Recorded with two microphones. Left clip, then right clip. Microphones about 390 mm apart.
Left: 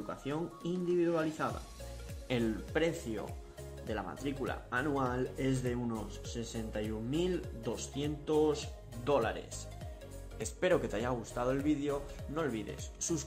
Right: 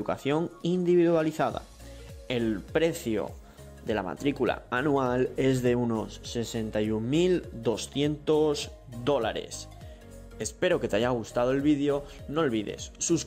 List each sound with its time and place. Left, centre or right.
0.1 s speech: right
10.4 s speech: centre